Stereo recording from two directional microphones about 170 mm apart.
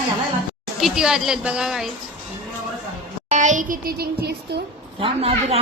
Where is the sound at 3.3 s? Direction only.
45° right (ahead or behind); by 4.3 s 70° right (ahead or behind).